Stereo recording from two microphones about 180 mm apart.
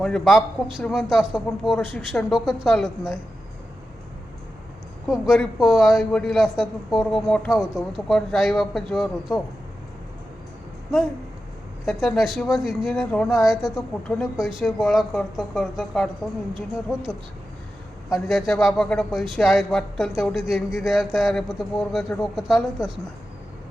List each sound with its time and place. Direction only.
0.0 s a man's voice: centre (ahead or behind)
5.0 s a man's voice: centre (ahead or behind)
11.9 s a man's voice: centre (ahead or behind)
18.1 s a man's voice: centre (ahead or behind)